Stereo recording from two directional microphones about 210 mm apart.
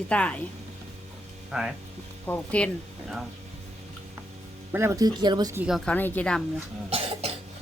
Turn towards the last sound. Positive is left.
turn(degrees=-30)  # may be behind; listen again after turning